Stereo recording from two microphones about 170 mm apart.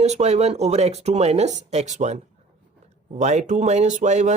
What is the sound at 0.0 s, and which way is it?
Speech, 40° right (ahead or behind).